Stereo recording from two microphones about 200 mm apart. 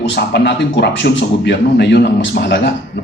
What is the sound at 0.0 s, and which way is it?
A man's voice, 55° left (ahead or behind).